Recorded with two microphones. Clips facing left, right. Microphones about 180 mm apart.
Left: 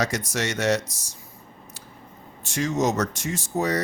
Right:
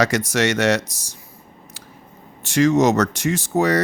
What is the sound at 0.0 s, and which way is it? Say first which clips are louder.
Speech: right 7 dB; 80° right.